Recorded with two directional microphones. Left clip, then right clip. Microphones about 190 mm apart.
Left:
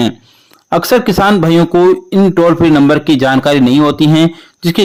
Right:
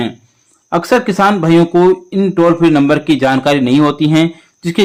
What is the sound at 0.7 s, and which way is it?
Speech, 40° left (ahead or behind).